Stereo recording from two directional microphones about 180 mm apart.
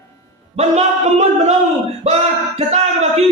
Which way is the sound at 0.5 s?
40° right (ahead or behind).